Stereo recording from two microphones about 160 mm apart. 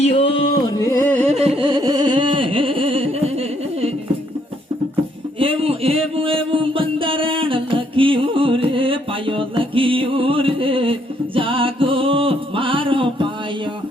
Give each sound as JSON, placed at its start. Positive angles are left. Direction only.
{"t": 0.1, "sound": "music", "side_deg": 35}
{"t": 0.8, "sound": "music", "side_deg": 15}
{"t": 1.3, "sound": "carnatic music", "side_deg": -40}
{"t": 5.4, "sound": "a sound", "side_deg": -35}
{"t": 11.3, "sound": "music", "side_deg": -35}